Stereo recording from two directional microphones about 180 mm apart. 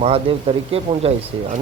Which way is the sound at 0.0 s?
30° right (ahead or behind).